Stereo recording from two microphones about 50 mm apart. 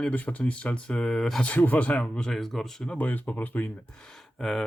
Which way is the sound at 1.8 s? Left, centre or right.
Left.